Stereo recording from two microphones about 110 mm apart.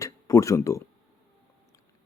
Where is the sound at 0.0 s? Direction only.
30° left (ahead or behind).